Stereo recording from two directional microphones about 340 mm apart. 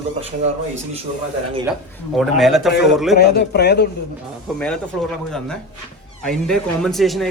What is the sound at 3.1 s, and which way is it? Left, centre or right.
Speech, left.